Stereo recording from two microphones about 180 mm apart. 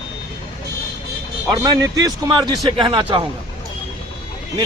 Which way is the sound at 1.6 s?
20° right (ahead or behind).